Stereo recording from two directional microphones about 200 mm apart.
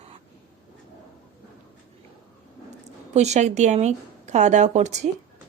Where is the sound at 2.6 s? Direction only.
35° right (ahead or behind).